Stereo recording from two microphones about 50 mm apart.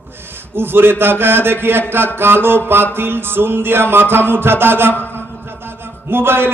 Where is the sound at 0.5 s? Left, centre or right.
Right.